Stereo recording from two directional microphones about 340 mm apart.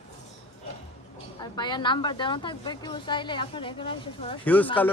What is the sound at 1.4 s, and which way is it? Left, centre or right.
A woman's voice, centre.